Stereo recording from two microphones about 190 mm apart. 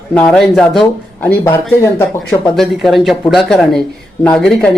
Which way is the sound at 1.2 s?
10° left (ahead or behind).